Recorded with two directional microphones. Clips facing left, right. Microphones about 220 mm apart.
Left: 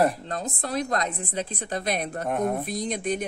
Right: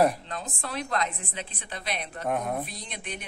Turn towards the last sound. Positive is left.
turn(degrees=40)  # may be behind; listen again after turning